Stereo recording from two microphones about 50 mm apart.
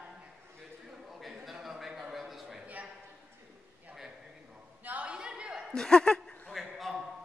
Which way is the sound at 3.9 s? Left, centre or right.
Right.